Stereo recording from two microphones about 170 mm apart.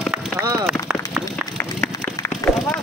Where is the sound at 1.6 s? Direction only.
15° left (ahead or behind).